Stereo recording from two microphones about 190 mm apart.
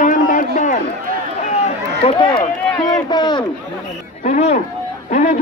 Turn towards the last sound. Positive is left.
turn(degrees=40)  # may be behind; listen again after turning